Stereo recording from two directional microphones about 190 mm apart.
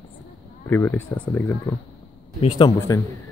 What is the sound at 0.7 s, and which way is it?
Speech, 10° left (ahead or behind).